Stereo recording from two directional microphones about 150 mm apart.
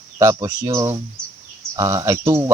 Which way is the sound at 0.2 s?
25° right (ahead or behind).